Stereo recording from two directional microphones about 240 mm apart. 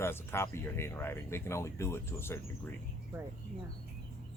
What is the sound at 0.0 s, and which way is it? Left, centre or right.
Speech, centre.